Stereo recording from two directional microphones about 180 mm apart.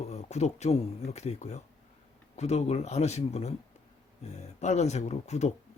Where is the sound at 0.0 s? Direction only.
40° left (ahead or behind).